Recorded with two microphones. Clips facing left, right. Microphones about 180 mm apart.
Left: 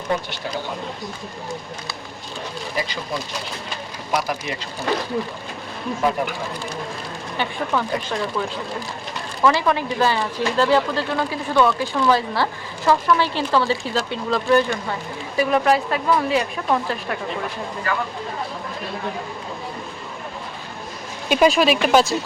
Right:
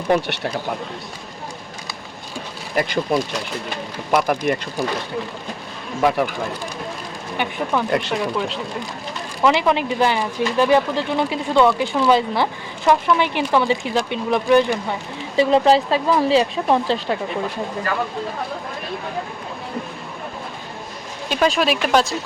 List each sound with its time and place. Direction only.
0.1 s speech: 70° right (ahead or behind)
2.7 s speech: 60° right (ahead or behind)
6.0 s speech: 70° right (ahead or behind)
7.3 s speech: 10° right (ahead or behind)
7.9 s speech: 70° right (ahead or behind)
9.4 s speech: 20° right (ahead or behind)
21.2 s speech: 10° left (ahead or behind)